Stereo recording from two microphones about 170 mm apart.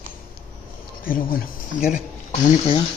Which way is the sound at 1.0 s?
55° left (ahead or behind).